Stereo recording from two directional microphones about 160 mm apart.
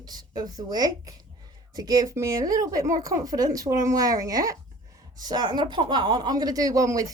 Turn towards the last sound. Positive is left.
turn(degrees=-20)  # may be behind; listen again after turning